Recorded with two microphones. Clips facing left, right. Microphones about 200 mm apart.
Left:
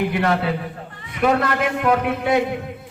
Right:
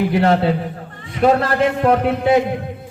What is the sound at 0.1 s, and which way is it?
A man's voice, 30° right (ahead or behind).